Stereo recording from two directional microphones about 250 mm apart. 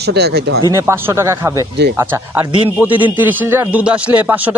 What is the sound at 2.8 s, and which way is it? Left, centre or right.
A man's voice, centre.